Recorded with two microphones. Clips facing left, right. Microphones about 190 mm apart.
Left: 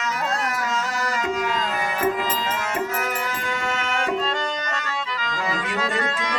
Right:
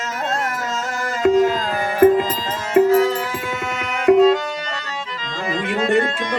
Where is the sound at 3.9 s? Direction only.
5° right (ahead or behind).